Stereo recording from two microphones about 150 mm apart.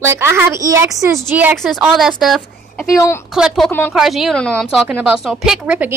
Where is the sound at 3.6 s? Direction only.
15° left (ahead or behind).